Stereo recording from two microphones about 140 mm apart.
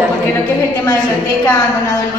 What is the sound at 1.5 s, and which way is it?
Speech, 20° left (ahead or behind).